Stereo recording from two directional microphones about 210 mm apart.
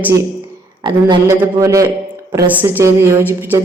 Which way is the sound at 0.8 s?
20° right (ahead or behind).